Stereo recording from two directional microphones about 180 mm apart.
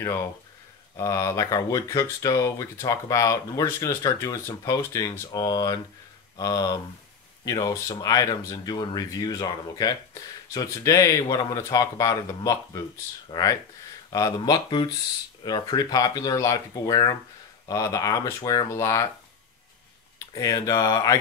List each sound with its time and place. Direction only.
0.9 s speech: 15° left (ahead or behind)
20.3 s speech: 20° left (ahead or behind)